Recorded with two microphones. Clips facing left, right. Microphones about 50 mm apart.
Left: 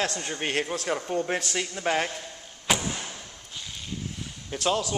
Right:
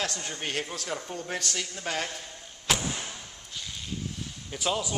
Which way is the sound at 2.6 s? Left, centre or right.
Centre.